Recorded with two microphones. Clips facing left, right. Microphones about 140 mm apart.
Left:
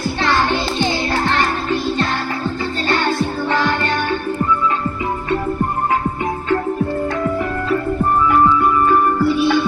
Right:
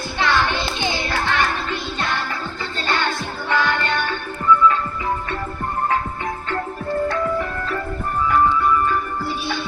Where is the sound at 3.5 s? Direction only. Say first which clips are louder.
Even; 40° left (ahead or behind).